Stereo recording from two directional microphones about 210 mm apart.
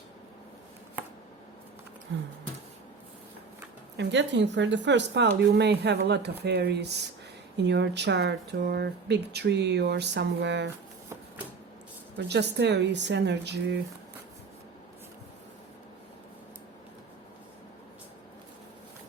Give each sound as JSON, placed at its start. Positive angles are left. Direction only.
{"t": 3.9, "sound": "speech", "side_deg": -60}
{"t": 12.1, "sound": "speech", "side_deg": -55}